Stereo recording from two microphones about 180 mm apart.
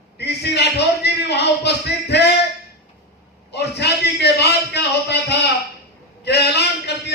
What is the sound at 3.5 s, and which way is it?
A man's voice, 65° left (ahead or behind).